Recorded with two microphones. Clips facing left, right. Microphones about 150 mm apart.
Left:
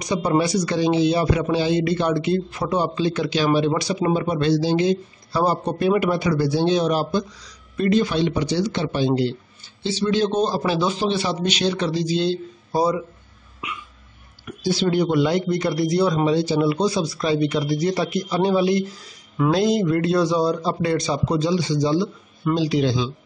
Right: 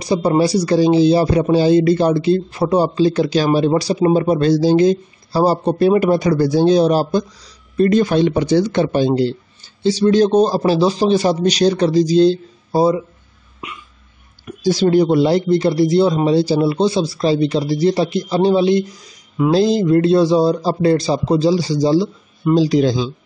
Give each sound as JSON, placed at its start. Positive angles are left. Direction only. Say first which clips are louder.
{"t": 0.0, "sound": "a man's voice", "louder": "right 5 dB", "side_deg": -30}
{"t": 7.9, "sound": "a man's voice", "louder": "right 3 dB", "side_deg": -45}
{"t": 12.7, "sound": "speech", "louder": "right 6 dB", "side_deg": -25}
{"t": 14.6, "sound": "speech", "louder": "right 7 dB", "side_deg": -40}
{"t": 19.5, "sound": "a man's voice", "louder": "right 6 dB", "side_deg": -30}